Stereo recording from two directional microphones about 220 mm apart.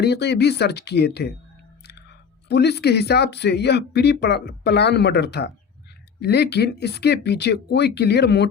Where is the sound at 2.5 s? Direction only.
50° left (ahead or behind).